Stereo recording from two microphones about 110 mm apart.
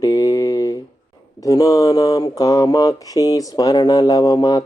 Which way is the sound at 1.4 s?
30° left (ahead or behind).